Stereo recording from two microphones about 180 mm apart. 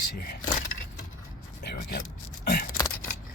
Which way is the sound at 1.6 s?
60° left (ahead or behind).